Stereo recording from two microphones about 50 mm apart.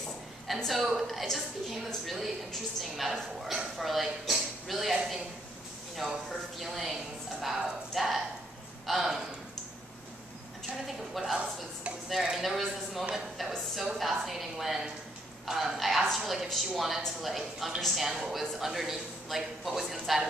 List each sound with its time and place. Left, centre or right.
0.7 s a woman's voice: centre
10.9 s a woman's voice: centre